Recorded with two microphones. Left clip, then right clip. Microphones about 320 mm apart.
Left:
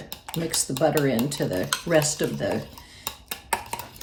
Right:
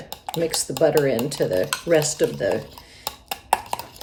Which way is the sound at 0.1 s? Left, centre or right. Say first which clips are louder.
Right 6 dB; centre.